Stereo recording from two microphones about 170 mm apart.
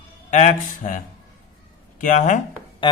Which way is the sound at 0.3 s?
45° left (ahead or behind).